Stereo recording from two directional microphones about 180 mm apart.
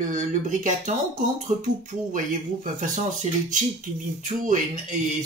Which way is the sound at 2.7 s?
45° right (ahead or behind).